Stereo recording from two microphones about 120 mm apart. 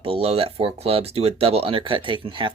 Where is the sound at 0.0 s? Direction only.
55° right (ahead or behind).